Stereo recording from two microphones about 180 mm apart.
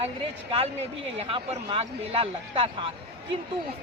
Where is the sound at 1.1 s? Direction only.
35° right (ahead or behind).